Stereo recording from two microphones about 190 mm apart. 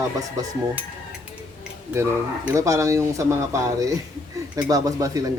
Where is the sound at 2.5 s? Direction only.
15° right (ahead or behind).